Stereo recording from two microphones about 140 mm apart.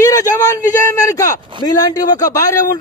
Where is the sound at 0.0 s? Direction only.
25° left (ahead or behind).